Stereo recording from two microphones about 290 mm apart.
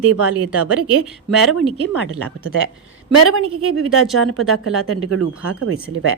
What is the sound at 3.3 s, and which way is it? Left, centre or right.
Speech, right.